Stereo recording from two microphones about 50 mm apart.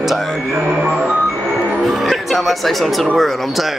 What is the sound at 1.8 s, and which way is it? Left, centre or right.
Speech, centre.